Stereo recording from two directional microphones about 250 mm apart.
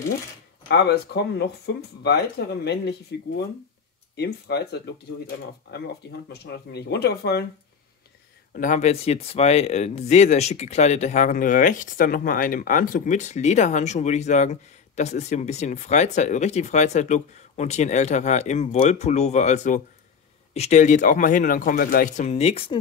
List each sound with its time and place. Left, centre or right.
0.7 s speech: left
6.2 s speech: left
8.5 s speech: left